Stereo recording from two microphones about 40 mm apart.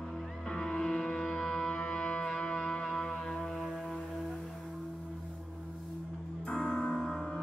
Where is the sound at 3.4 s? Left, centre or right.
Centre.